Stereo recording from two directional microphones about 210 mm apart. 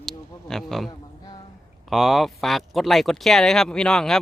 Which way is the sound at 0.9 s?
20° left (ahead or behind).